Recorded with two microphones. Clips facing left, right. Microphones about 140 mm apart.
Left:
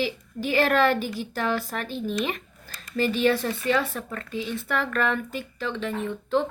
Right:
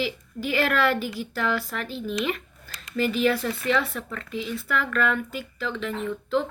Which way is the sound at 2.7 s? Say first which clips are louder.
Even; 35° left (ahead or behind).